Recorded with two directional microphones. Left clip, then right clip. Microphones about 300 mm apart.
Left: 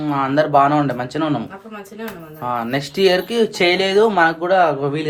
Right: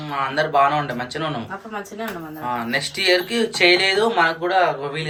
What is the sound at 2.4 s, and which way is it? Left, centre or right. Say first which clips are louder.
Speech: left 2 dB; left.